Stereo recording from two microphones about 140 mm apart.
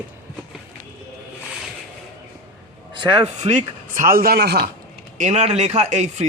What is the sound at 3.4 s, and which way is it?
Speech, 60° right (ahead or behind).